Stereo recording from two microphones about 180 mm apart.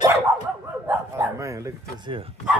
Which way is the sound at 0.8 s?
15° right (ahead or behind).